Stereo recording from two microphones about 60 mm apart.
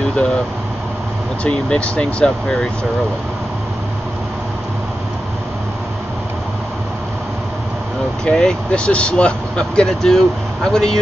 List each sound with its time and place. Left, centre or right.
1.4 s speech: centre
8.3 s speech: centre